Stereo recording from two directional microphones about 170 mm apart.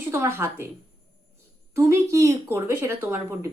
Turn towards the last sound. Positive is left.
turn(degrees=-15)  # may be behind; listen again after turning